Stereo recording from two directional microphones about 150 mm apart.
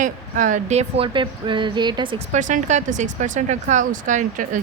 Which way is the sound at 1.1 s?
35° right (ahead or behind).